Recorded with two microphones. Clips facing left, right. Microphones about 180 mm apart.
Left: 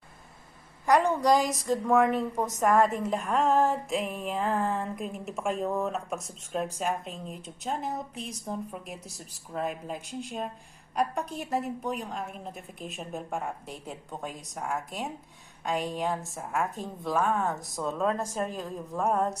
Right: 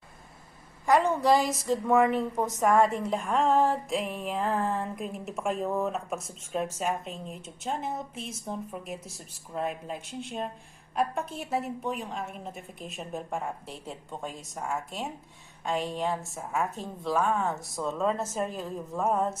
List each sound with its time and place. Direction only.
1.1 s a woman's voice: 5° right (ahead or behind)